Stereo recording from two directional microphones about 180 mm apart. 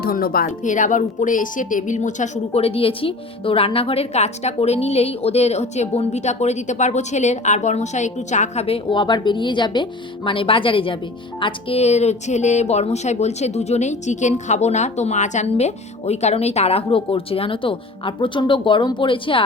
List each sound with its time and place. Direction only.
0.0 s a woman's voice: 55° left (ahead or behind); by 19.5 s 30° left (ahead or behind)